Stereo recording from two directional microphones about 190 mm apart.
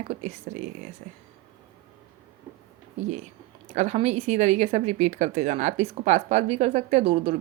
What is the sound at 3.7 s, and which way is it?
Speech, 35° right (ahead or behind).